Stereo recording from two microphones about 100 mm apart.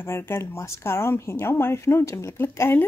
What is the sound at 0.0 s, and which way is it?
Speech, 25° left (ahead or behind).